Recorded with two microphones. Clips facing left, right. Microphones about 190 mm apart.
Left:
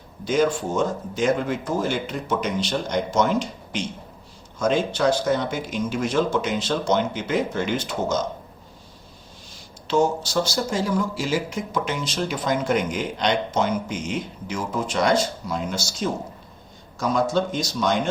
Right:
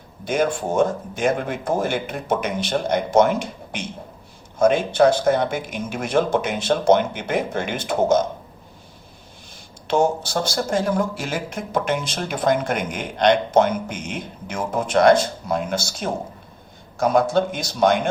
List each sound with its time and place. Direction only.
0.3 s speech: 55° right (ahead or behind)
9.8 s speech: 55° right (ahead or behind)